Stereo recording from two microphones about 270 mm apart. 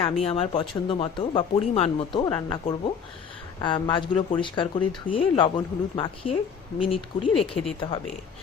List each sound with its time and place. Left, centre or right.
0.0 s speech: left